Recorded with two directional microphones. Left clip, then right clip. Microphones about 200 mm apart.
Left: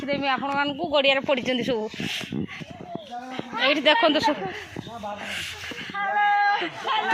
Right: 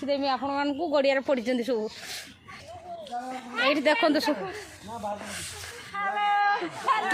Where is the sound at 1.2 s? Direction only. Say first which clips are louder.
Left 3 dB; 15° right (ahead or behind).